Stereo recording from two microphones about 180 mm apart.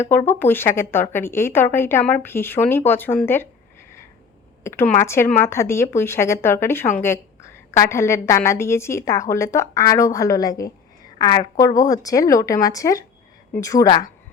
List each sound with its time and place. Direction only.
0.0 s speech: 10° left (ahead or behind)
4.6 s speech: 15° left (ahead or behind)